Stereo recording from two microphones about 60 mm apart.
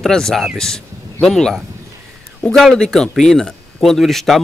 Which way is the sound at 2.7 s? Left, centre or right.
Centre.